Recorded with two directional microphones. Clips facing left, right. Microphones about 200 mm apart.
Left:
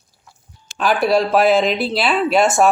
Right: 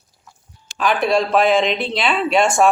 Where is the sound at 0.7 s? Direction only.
5° left (ahead or behind).